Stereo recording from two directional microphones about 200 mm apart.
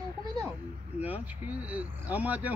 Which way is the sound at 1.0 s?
10° right (ahead or behind).